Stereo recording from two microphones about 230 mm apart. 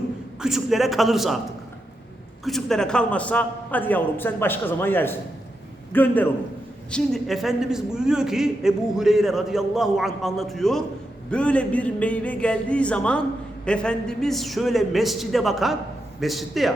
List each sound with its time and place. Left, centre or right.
0.4 s a man's voice: centre
2.4 s a man's voice: centre